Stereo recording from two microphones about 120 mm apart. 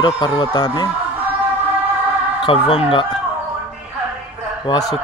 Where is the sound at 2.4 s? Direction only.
50° left (ahead or behind).